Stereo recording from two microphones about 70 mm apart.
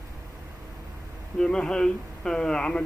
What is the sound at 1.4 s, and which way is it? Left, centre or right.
Speech, centre.